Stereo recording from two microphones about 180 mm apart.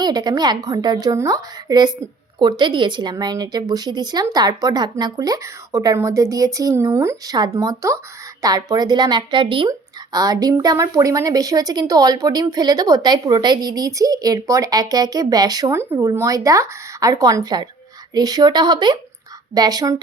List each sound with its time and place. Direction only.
0.0 s a woman's voice: 25° right (ahead or behind)